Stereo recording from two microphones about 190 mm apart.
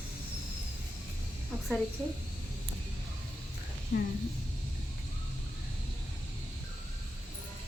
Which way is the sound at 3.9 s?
65° left (ahead or behind).